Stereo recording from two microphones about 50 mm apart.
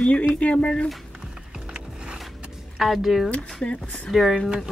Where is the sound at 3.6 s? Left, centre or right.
Left.